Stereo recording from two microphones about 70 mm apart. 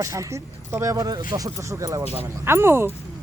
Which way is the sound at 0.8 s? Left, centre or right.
Right.